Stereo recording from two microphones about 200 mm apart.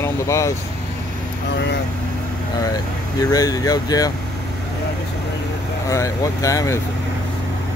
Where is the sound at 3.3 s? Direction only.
20° left (ahead or behind).